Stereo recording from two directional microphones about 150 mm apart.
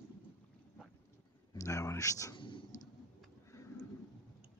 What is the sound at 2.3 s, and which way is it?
Writing, 35° left (ahead or behind).